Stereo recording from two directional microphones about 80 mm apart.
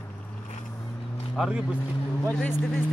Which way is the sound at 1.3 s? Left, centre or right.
Centre.